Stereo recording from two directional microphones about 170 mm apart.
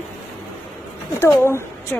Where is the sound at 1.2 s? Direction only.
15° left (ahead or behind).